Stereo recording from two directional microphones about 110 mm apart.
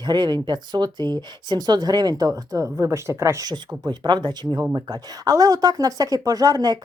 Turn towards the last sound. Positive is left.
turn(degrees=-35)  # may be behind; listen again after turning